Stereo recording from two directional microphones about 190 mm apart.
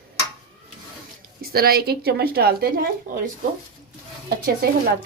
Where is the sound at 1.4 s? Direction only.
50° right (ahead or behind).